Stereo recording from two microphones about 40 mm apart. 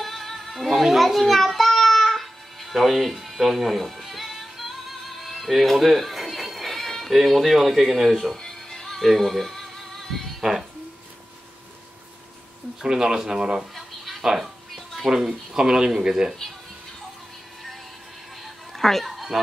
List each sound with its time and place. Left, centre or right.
0.0 s child singing: centre
3.9 s music: centre
8.4 s music: centre
10.4 s speech: centre
12.8 s speech: centre
13.7 s a sound: centre
14.2 s speech: centre
18.4 s a sound: centre